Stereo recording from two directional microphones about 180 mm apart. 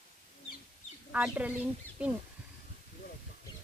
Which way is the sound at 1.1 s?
5° right (ahead or behind).